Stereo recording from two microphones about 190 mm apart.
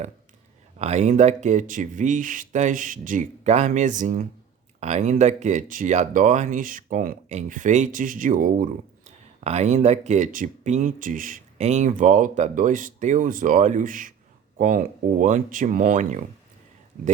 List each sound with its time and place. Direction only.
0.8 s speech: 35° right (ahead or behind)